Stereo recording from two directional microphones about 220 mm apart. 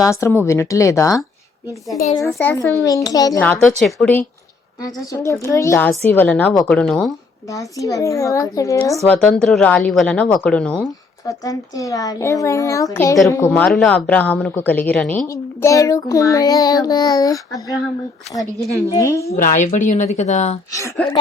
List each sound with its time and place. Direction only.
0.0 s speech: 15° left (ahead or behind)
4.8 s a woman's voice: 15° left (ahead or behind)
7.5 s speech: 15° left (ahead or behind)
9.0 s a woman's voice: 5° left (ahead or behind)
11.3 s speech: 15° left (ahead or behind)
18.9 s speech: 15° left (ahead or behind)
19.3 s a woman's voice: 35° left (ahead or behind)